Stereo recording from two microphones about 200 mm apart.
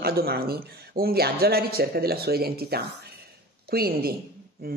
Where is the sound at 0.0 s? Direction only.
50° right (ahead or behind).